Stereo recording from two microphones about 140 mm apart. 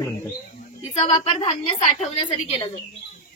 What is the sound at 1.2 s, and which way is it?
A woman's voice, 45° left (ahead or behind).